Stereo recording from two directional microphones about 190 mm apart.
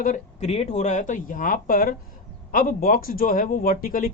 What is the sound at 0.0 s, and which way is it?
Speech, 40° left (ahead or behind).